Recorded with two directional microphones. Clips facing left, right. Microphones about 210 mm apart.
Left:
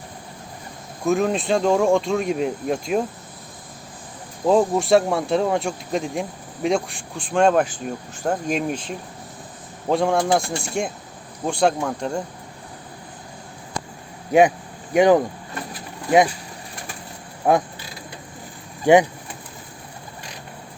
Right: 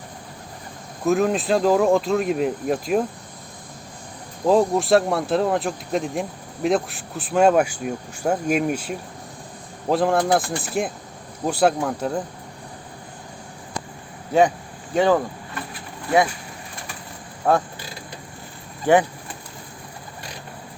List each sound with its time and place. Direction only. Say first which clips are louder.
1.0 s speech: right 1 dB; centre (ahead or behind)
4.4 s speech: even; centre (ahead or behind)
14.3 s speech: left 2 dB; 15° left (ahead or behind)
17.5 s speech: left 1 dB; 15° left (ahead or behind)
18.9 s speech: left 3 dB; 15° left (ahead or behind)